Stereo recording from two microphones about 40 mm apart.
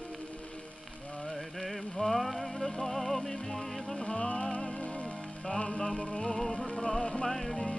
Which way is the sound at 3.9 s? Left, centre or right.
Left.